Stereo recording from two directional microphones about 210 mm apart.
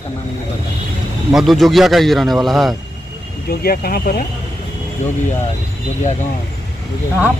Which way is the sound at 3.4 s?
45° left (ahead or behind).